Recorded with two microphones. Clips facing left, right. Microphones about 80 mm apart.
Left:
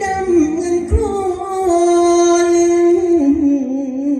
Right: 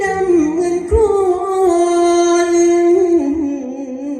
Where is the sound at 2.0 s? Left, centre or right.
Right.